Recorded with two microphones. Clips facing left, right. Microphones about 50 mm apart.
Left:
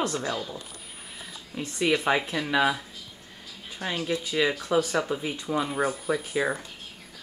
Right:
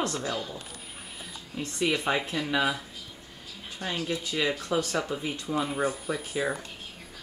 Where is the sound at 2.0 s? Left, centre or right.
Centre.